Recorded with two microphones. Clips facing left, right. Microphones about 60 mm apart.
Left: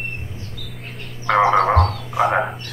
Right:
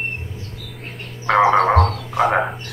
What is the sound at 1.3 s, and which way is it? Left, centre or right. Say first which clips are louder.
Frog: right 1 dB; centre.